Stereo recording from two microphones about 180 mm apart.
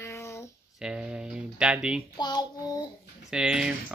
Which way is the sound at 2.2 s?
25° left (ahead or behind).